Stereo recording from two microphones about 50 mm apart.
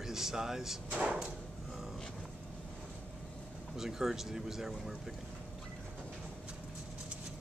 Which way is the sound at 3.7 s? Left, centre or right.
Centre.